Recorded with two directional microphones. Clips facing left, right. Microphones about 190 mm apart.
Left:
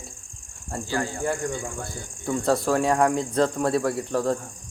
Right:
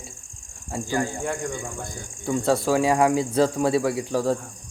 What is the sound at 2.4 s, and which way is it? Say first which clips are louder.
Speech: right 1 dB; centre (ahead or behind).